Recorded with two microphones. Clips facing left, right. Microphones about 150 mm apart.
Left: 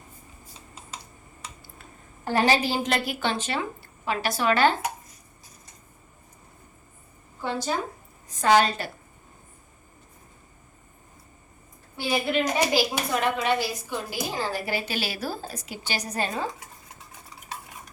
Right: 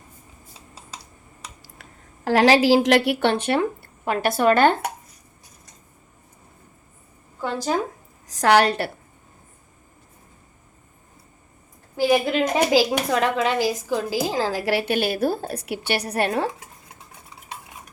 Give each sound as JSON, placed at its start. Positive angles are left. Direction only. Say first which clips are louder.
{"t": 1.6, "sound": "a woman's voice", "louder": "even", "side_deg": -90}
{"t": 8.3, "sound": "a woman's voice", "louder": "right 3 dB", "side_deg": -80}
{"t": 11.9, "sound": "a woman's voice", "louder": "right 6 dB", "side_deg": -90}